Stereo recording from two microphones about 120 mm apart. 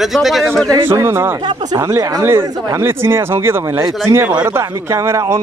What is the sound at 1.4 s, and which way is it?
Speech, 35° right (ahead or behind).